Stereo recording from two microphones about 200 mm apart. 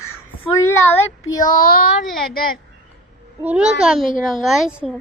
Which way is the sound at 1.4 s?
45° left (ahead or behind).